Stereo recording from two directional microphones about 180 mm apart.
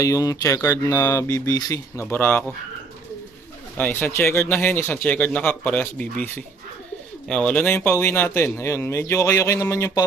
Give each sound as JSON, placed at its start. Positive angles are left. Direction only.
{"t": 0.0, "sound": "speech", "side_deg": 20}
{"t": 3.8, "sound": "speech", "side_deg": 10}